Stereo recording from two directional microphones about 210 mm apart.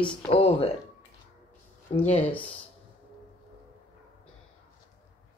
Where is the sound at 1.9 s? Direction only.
30° left (ahead or behind).